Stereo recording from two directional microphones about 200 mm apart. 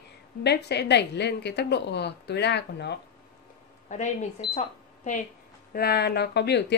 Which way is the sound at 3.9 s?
35° left (ahead or behind).